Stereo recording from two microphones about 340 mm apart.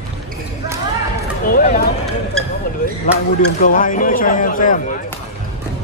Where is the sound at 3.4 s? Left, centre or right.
Left.